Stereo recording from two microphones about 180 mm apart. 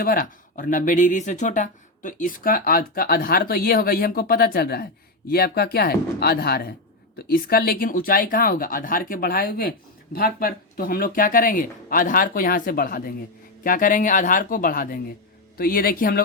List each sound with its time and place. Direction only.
0.0 s speech: 55° left (ahead or behind)